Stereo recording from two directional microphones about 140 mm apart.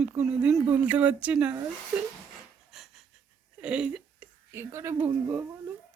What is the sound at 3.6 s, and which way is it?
Speech, 10° right (ahead or behind).